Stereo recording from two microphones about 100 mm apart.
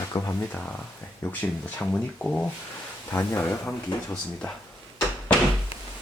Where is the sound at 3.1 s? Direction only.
30° left (ahead or behind).